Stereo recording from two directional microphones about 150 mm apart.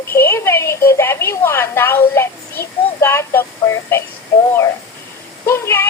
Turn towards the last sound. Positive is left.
turn(degrees=15)  # may be behind; listen again after turning